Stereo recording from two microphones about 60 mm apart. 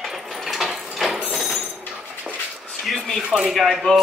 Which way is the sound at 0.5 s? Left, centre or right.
Centre.